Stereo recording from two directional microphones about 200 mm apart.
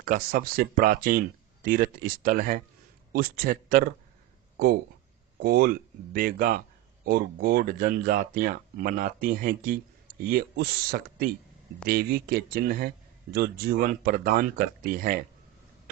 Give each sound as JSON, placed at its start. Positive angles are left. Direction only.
{"t": 0.0, "sound": "speech", "side_deg": -45}
{"t": 5.4, "sound": "speech", "side_deg": -50}